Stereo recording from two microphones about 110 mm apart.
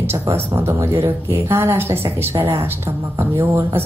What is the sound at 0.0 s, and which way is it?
Speech, 20° right (ahead or behind).